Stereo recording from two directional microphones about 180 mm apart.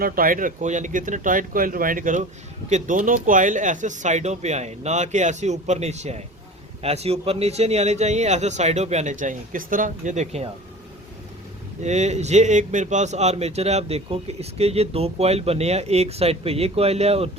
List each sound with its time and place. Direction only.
0.0 s speech: 50° right (ahead or behind)
11.8 s speech: 40° right (ahead or behind)